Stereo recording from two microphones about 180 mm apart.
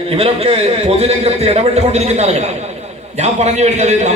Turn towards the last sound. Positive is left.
turn(degrees=-40)  # may be behind; listen again after turning